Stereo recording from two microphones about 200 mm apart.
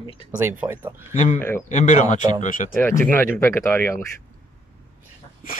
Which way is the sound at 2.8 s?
10° left (ahead or behind).